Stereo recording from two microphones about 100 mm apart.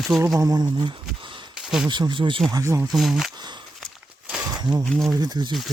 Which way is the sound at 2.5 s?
35° right (ahead or behind).